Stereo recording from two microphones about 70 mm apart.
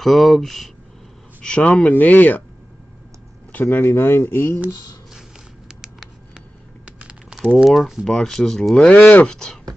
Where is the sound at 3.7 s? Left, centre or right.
Left.